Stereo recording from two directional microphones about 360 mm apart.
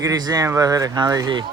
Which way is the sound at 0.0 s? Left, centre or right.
Centre.